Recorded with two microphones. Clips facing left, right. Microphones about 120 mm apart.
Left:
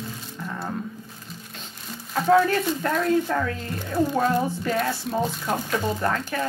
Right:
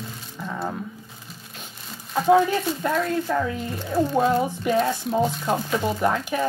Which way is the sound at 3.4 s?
10° right (ahead or behind).